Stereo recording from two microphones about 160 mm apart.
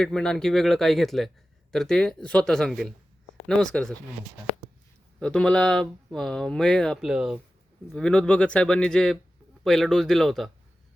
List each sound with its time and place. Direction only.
0.0 s speech: 5° left (ahead or behind)
5.2 s speech: 5° left (ahead or behind)